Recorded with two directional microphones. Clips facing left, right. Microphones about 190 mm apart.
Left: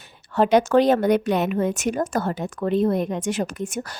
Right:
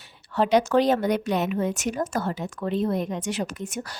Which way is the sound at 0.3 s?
50° left (ahead or behind).